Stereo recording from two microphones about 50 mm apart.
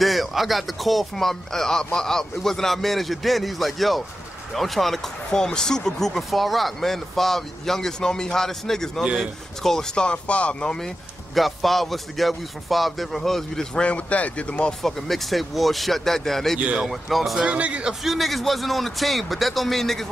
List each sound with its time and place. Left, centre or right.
0.0 s a man's voice: centre
9.0 s speech: centre
9.6 s speech: centre
11.3 s a man's voice: centre
13.7 s speech: left
14.8 s a man's voice: centre
16.5 s a man's voice: right
16.8 s a man's voice: centre
17.4 s speech: right
18.0 s a man's voice: centre